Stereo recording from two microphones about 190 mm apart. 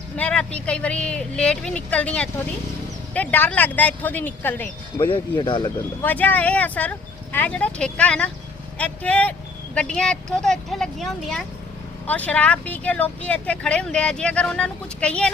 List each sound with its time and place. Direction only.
0.2 s speech: 5° left (ahead or behind)
4.9 s speech: 25° left (ahead or behind)
6.0 s speech: 10° left (ahead or behind)